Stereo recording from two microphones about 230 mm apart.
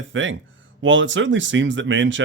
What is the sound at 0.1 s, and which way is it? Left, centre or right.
Speech, right.